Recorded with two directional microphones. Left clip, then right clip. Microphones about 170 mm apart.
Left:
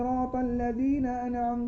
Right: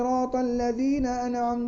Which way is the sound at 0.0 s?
40° right (ahead or behind).